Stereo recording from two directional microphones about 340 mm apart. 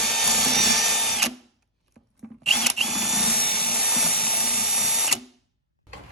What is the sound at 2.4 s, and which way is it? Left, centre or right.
Drill, centre.